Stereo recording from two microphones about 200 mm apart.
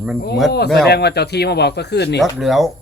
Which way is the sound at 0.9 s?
55° left (ahead or behind).